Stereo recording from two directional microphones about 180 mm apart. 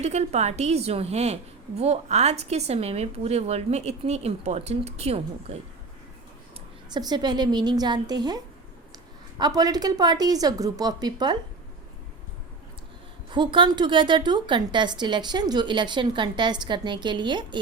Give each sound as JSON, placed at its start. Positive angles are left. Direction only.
{"t": 0.0, "sound": "speech", "side_deg": -35}
{"t": 6.9, "sound": "a woman's voice", "side_deg": -25}
{"t": 9.4, "sound": "a woman's voice", "side_deg": -20}
{"t": 13.3, "sound": "a woman's voice", "side_deg": -25}